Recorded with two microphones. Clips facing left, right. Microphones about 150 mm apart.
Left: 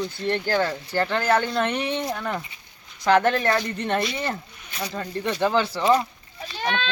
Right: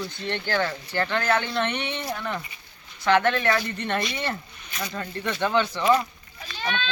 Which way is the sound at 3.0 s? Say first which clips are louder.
Left 2 dB; 40° left (ahead or behind).